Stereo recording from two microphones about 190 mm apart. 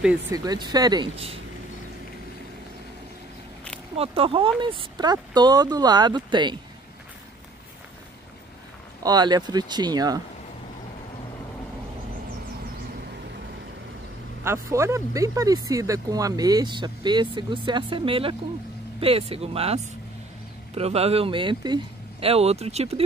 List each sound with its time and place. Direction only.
0.3 s speech: 20° right (ahead or behind)
3.9 s speech: 30° right (ahead or behind)
9.0 s speech: 20° right (ahead or behind)
14.4 s speech: 15° right (ahead or behind); by 23.0 s 35° right (ahead or behind)